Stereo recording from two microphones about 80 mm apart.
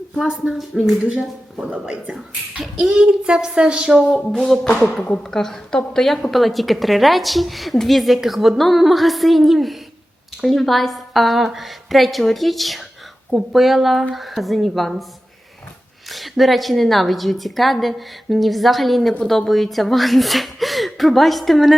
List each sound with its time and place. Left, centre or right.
0.2 s a child's voice: centre
1.7 s a child's voice: centre
4.1 s a sound: centre
5.0 s a woman's voice: centre
16.0 s a woman's voice: centre